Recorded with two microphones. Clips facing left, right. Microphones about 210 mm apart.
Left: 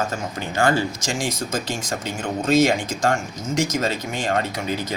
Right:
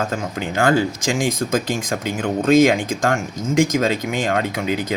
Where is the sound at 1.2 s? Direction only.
55° right (ahead or behind).